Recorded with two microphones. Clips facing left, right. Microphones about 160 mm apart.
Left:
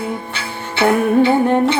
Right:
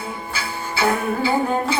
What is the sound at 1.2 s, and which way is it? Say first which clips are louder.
Music: left 7 dB; 70° left (ahead or behind).